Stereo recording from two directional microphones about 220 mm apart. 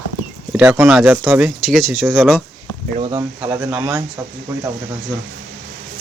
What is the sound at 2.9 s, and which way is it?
Speech, 25° right (ahead or behind).